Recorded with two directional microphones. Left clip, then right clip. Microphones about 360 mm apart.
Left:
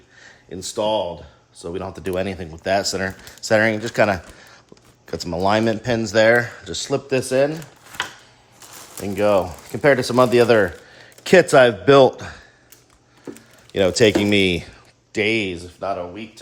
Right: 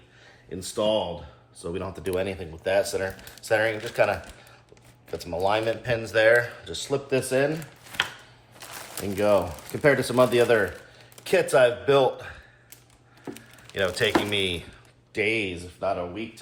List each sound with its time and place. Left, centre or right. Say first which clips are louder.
0.5 s speech: left 4 dB; left
9.1 s speech: left 4 dB; left
13.7 s speech: left 8 dB; centre